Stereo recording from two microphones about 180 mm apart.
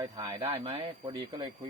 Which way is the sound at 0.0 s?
25° right (ahead or behind).